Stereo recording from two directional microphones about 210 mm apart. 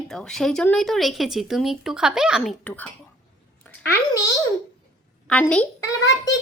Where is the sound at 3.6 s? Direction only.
10° left (ahead or behind).